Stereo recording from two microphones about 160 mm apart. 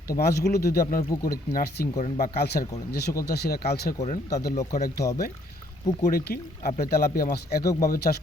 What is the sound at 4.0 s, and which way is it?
Speech, 45° left (ahead or behind).